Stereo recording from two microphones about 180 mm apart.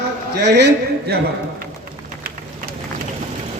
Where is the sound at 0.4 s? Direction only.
70° right (ahead or behind).